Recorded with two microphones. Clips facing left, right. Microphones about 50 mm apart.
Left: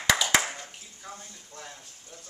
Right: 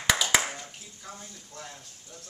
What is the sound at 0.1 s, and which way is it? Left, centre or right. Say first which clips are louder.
Clapping: left 1 dB; centre.